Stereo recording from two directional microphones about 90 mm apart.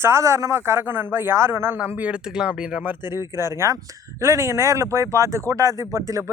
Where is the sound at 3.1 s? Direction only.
30° right (ahead or behind).